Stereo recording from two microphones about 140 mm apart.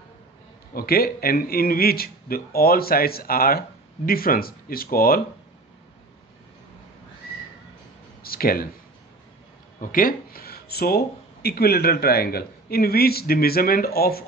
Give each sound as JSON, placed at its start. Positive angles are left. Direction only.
{"t": 0.7, "sound": "speech", "side_deg": 90}
{"t": 8.2, "sound": "a sound", "side_deg": 90}
{"t": 9.8, "sound": "speech", "side_deg": 75}